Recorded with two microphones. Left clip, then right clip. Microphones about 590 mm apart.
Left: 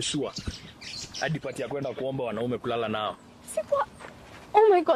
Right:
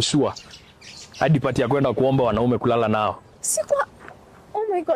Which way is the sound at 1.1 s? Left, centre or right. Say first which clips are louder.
Right 11 dB; right.